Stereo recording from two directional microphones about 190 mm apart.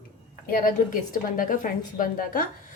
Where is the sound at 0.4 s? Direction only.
45° left (ahead or behind).